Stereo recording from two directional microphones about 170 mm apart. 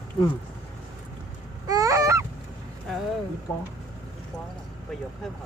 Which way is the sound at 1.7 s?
20° right (ahead or behind).